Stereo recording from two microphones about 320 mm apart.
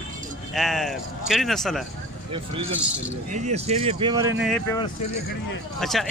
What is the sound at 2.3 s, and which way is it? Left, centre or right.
Speech, centre.